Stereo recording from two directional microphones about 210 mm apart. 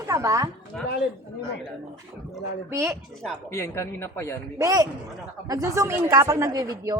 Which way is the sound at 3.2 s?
5° left (ahead or behind).